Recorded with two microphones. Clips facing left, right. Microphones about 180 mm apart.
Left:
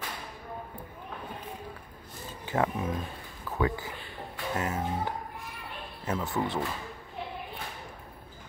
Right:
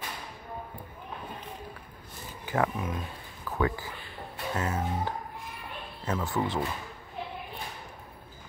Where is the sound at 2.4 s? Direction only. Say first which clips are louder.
Even; 25° left (ahead or behind).